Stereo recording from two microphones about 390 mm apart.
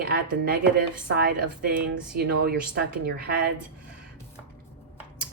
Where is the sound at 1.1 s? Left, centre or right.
Right.